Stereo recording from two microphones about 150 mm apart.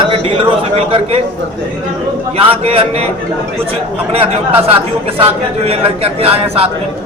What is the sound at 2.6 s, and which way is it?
Speech, 40° right (ahead or behind).